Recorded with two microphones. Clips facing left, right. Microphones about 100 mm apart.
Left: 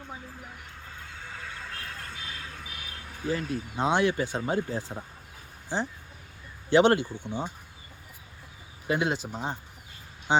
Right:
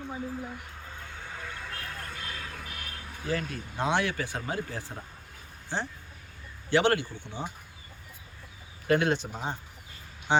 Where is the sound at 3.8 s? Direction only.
20° left (ahead or behind).